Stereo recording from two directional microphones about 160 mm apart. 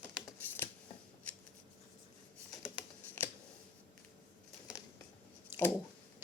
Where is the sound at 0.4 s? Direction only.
10° left (ahead or behind).